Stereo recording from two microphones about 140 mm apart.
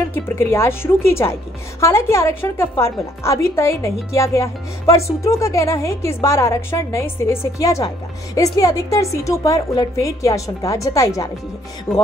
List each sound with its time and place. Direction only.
0.1 s a woman's voice: 15° left (ahead or behind)